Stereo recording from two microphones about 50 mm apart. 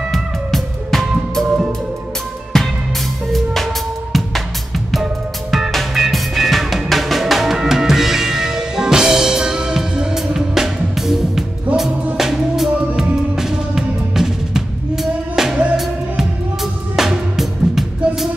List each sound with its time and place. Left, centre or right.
0.1 s music: centre
2.5 s music: centre
5.0 s music: centre